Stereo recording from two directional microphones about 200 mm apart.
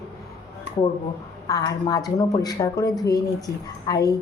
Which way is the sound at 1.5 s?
20° left (ahead or behind).